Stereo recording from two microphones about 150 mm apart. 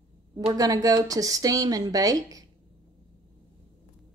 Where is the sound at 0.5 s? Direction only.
25° right (ahead or behind).